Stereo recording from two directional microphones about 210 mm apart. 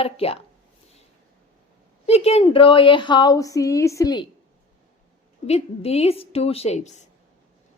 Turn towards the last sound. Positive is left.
turn(degrees=35)  # may be behind; listen again after turning